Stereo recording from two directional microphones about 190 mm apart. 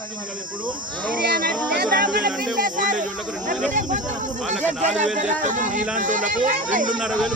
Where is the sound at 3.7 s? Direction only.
40° right (ahead or behind).